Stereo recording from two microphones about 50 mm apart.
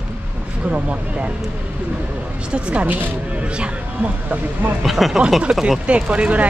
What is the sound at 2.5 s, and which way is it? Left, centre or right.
Speech, right.